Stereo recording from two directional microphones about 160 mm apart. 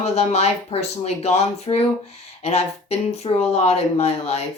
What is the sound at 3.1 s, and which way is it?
A woman's voice, 40° left (ahead or behind).